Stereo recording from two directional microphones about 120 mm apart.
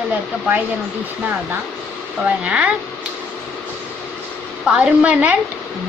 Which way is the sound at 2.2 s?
10° right (ahead or behind).